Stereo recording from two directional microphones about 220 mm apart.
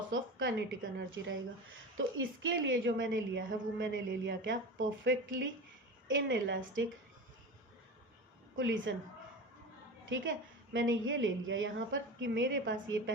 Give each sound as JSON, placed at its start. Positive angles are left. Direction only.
{"t": 0.1, "sound": "a sound", "side_deg": -60}
{"t": 0.9, "sound": "a woman's voice", "side_deg": -60}
{"t": 8.5, "sound": "a woman's voice", "side_deg": -60}
{"t": 10.1, "sound": "a woman's voice", "side_deg": -55}